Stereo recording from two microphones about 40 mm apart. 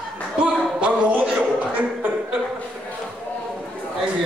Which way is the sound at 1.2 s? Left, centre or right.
Right.